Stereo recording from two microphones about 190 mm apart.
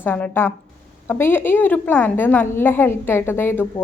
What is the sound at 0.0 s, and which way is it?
A woman's voice, 10° left (ahead or behind).